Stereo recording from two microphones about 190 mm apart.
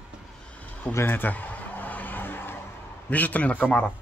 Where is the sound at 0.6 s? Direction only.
10° left (ahead or behind).